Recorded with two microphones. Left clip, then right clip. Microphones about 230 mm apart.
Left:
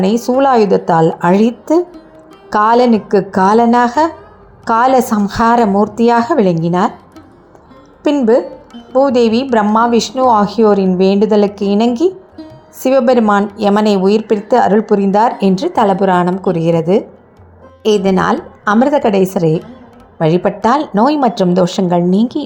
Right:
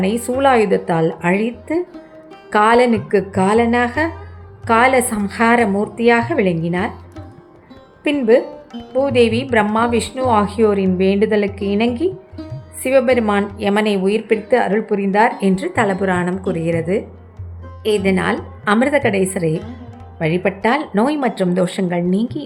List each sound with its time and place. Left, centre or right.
0.3 s a woman's voice: centre
8.0 s a woman's voice: centre
12.4 s music: centre
12.8 s a woman's voice: centre